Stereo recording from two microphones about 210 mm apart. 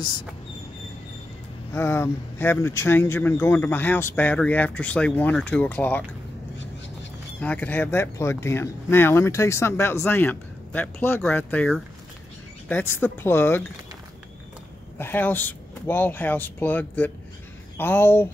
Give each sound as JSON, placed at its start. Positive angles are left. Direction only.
{"t": 1.7, "sound": "speech", "side_deg": 10}
{"t": 7.3, "sound": "speech", "side_deg": 5}
{"t": 15.0, "sound": "speech", "side_deg": 10}